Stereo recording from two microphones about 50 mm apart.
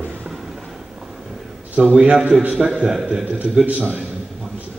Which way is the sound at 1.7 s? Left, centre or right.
Centre.